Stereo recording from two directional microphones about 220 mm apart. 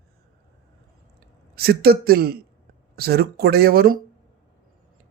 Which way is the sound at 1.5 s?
45° right (ahead or behind).